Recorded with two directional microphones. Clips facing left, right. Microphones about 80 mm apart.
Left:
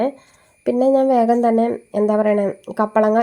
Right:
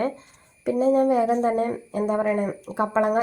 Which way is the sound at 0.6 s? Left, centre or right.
Left.